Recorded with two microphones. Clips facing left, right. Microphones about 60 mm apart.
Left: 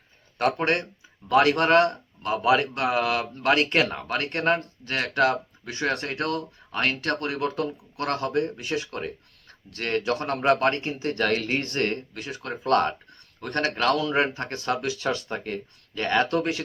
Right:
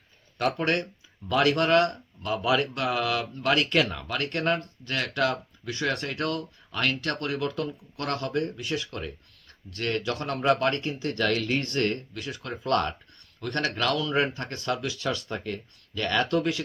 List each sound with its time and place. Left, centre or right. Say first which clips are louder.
0.5 s speech: left 2 dB; left
6.1 s speech: left 2 dB; left